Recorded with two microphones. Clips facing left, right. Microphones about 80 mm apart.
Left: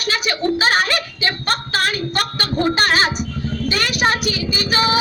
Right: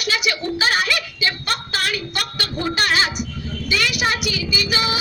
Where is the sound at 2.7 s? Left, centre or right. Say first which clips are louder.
Left 3 dB; left.